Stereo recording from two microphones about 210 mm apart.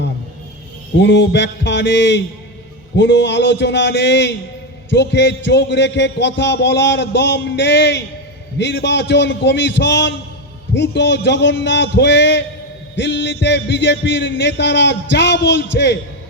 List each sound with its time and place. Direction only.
0.9 s a man's voice: 55° left (ahead or behind)